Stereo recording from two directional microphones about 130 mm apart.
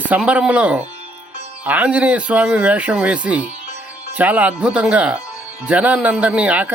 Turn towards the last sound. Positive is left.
turn(degrees=-10)  # may be behind; listen again after turning